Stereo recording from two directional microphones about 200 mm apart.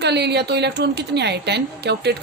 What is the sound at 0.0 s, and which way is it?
A woman's voice, 55° right (ahead or behind).